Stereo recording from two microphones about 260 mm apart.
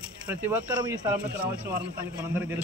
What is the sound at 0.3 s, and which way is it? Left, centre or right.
Speech, centre.